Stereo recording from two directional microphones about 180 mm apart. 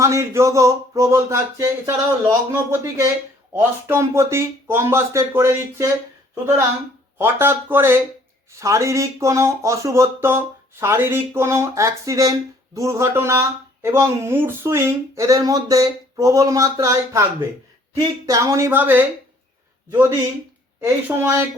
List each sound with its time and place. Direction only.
0.0 s speech: 15° right (ahead or behind)
7.2 s speech: 15° right (ahead or behind)
20.8 s speech: 15° right (ahead or behind)